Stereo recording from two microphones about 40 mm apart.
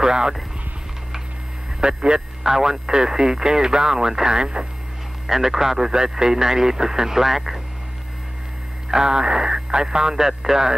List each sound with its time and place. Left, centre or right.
0.0 s speech: centre
1.8 s speech: right
5.2 s speech: centre
8.8 s speech: centre